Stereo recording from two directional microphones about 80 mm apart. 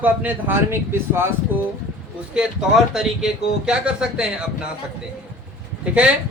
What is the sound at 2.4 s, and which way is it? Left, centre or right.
Speech, centre.